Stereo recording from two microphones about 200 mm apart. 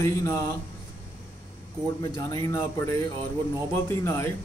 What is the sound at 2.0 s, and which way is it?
Speech, 20° left (ahead or behind).